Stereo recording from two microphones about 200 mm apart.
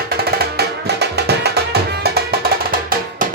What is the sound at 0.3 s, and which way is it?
Music, 55° right (ahead or behind).